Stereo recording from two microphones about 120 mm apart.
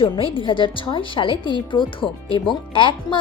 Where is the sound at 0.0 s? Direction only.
45° left (ahead or behind).